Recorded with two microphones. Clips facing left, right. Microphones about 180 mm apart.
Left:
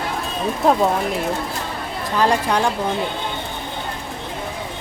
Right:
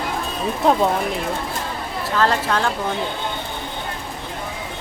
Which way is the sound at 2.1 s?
15° left (ahead or behind).